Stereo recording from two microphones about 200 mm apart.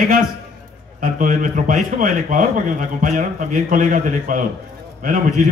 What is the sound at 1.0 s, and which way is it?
A man's voice, 40° right (ahead or behind).